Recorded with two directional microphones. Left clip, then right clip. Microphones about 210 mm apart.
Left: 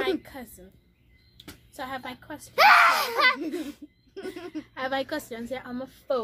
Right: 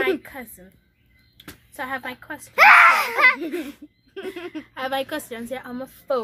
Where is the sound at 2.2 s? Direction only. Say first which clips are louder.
Right 5 dB; centre (ahead or behind).